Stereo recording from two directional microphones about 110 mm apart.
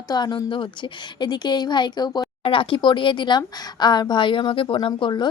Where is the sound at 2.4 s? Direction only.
50° left (ahead or behind).